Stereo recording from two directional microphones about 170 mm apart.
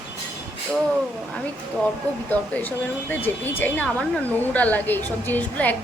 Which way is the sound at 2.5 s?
10° left (ahead or behind).